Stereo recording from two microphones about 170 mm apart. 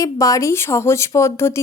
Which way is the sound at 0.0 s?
20° left (ahead or behind).